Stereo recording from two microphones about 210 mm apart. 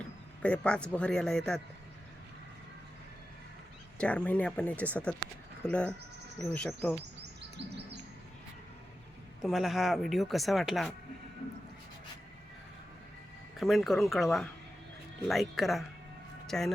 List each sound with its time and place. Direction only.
0.4 s speech: 5° left (ahead or behind)
3.9 s speech: 5° left (ahead or behind)
9.4 s speech: centre (ahead or behind)
13.6 s speech: centre (ahead or behind)